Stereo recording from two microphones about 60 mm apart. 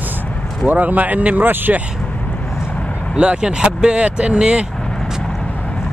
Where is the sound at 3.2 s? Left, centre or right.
Centre.